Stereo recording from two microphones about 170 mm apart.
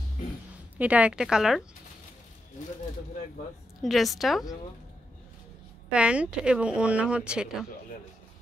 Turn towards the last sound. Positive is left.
turn(degrees=-5)  # may be behind; listen again after turning